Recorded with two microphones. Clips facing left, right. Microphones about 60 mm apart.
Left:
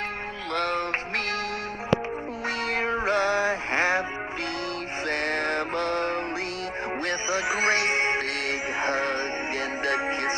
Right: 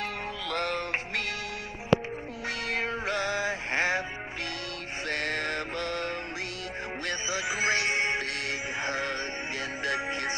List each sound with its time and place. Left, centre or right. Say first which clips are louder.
0.5 s music: left 4 dB; left
2.7 s music: left 6 dB; left
5.0 s music: left 4 dB; left